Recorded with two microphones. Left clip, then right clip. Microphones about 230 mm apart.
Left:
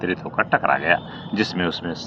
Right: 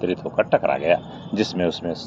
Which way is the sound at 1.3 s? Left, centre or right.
Centre.